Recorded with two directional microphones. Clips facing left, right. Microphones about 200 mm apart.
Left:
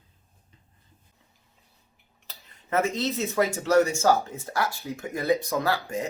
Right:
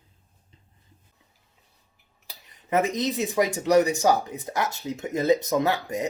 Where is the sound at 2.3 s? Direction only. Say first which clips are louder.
Right 3 dB; 15° right (ahead or behind).